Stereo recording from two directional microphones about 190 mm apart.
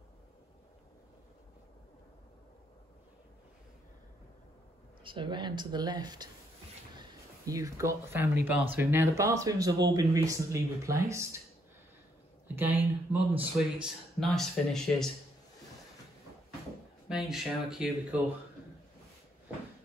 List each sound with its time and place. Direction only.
5.0 s speech: 25° right (ahead or behind)
12.5 s speech: 10° right (ahead or behind)
13.3 s speech: 30° right (ahead or behind)
13.8 s speech: centre (ahead or behind)
17.1 s speech: centre (ahead or behind)